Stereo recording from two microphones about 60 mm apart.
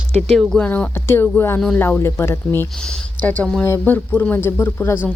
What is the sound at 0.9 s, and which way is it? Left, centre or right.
Speech, left.